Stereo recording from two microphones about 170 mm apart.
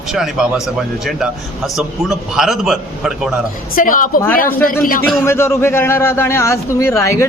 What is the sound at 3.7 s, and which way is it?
Speech, 55° left (ahead or behind).